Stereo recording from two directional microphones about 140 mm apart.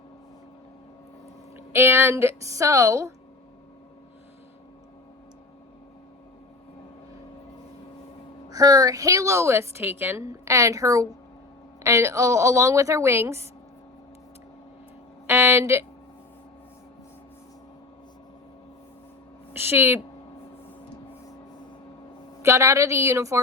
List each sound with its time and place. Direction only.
1.5 s a woman's voice: 15° right (ahead or behind)
8.4 s a woman's voice: 25° right (ahead or behind)
15.3 s a sound: 15° right (ahead or behind)
19.5 s speech: 15° right (ahead or behind)
22.4 s a woman's voice: 20° right (ahead or behind)